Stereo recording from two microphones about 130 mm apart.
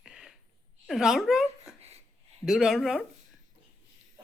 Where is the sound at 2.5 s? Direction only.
5° right (ahead or behind).